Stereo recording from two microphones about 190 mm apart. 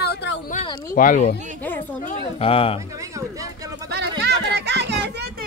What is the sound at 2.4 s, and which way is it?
Speech, 30° left (ahead or behind).